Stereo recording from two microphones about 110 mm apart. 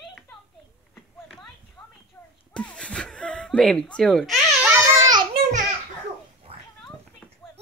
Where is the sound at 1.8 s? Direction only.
10° left (ahead or behind).